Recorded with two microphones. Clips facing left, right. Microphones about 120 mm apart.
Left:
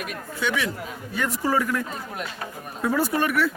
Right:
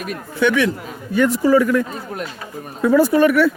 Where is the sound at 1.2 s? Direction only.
85° right.